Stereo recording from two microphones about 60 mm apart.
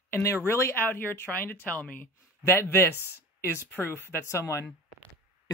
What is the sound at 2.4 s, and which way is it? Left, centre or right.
Speech, left.